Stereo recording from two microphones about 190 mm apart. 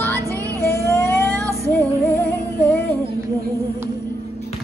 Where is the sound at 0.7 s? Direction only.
15° left (ahead or behind).